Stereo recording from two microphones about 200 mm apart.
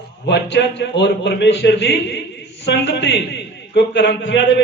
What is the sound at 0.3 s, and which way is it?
A man's voice, 60° left (ahead or behind).